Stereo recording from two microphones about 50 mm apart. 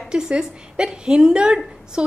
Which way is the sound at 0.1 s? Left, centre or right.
Centre.